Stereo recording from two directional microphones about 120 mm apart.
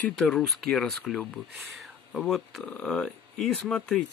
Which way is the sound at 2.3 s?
Centre (ahead or behind).